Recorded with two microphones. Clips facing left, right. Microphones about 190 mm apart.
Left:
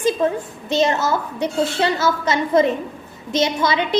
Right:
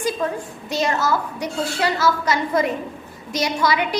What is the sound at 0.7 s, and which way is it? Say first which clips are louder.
A woman's voice: left 3 dB; 25° left (ahead or behind).